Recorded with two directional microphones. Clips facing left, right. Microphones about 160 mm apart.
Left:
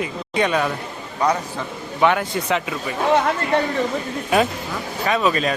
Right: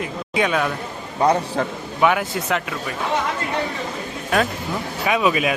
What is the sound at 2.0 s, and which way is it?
Speech, 5° right (ahead or behind).